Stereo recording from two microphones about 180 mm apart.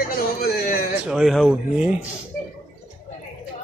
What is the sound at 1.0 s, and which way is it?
Speech, centre (ahead or behind).